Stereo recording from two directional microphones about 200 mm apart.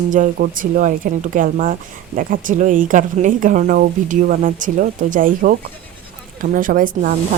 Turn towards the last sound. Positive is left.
turn(degrees=-45)  # may be behind; listen again after turning